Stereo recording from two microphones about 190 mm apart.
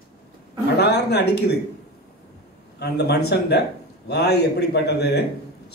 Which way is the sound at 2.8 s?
60° left (ahead or behind).